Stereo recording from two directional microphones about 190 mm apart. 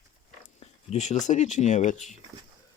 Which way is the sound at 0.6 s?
35° left (ahead or behind).